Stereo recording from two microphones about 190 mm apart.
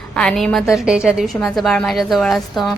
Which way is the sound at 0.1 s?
5° left (ahead or behind).